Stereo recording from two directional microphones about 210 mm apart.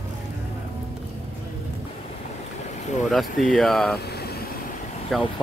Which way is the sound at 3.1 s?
Centre (ahead or behind).